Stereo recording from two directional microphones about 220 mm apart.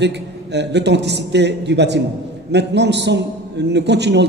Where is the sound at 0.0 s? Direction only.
50° right (ahead or behind).